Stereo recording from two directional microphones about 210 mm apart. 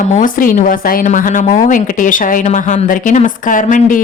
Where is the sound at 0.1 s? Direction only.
40° left (ahead or behind).